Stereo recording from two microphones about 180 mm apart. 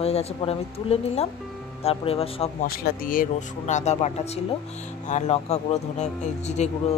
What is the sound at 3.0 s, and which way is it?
Speech, 45° left (ahead or behind).